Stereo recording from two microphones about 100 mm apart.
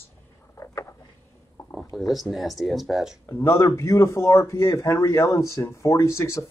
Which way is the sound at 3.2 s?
25° left (ahead or behind).